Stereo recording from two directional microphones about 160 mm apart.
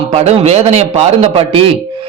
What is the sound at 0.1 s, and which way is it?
A man's voice, 40° right (ahead or behind).